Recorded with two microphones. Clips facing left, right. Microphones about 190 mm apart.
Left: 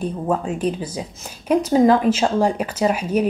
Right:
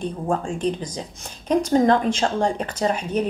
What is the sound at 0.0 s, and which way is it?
A woman's voice, 5° left (ahead or behind).